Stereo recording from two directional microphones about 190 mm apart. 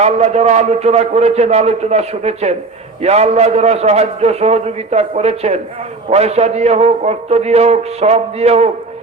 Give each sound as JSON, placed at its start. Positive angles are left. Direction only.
{"t": 0.0, "sound": "a man's voice", "side_deg": -35}